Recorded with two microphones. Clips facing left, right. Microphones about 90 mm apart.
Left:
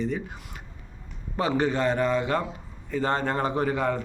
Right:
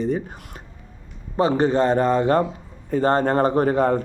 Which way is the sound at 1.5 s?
35° right (ahead or behind).